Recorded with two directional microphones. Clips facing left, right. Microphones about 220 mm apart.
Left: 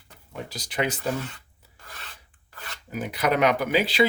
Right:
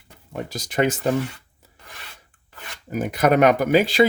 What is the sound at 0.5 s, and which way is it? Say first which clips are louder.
Speech: right 6 dB; 45° right (ahead or behind).